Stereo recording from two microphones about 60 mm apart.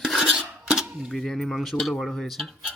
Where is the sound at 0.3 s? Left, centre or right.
Centre.